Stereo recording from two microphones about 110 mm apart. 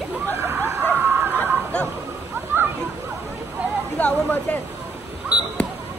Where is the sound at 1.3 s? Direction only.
10° left (ahead or behind).